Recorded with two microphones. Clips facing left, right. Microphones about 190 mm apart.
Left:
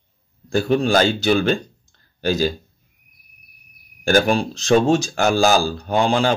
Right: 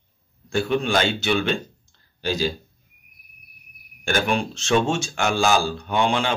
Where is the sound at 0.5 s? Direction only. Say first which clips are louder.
Left 4 dB; 35° left (ahead or behind).